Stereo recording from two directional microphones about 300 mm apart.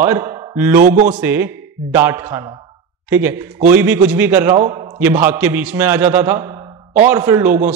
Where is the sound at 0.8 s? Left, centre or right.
Right.